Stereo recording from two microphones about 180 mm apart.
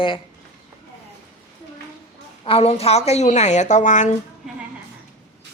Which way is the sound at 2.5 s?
35° left (ahead or behind).